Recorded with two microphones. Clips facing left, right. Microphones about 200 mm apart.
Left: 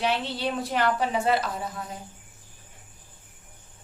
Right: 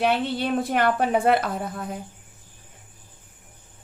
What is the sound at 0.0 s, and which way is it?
A woman's voice, 55° right (ahead or behind).